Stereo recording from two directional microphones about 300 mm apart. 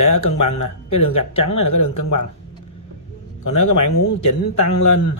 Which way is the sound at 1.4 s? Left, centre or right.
Left.